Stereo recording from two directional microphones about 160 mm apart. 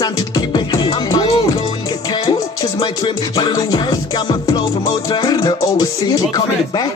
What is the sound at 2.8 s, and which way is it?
Music, 30° left (ahead or behind).